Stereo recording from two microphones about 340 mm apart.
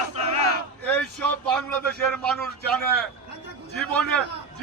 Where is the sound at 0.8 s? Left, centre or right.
Centre.